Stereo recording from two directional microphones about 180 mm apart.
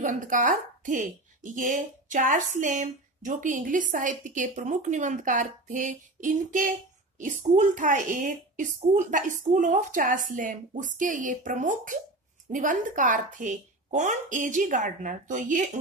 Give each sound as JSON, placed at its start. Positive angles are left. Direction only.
{"t": 0.0, "sound": "a woman's voice", "side_deg": -45}